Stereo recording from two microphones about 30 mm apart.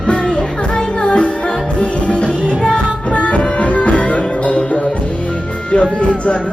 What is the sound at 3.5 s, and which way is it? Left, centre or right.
Music, left.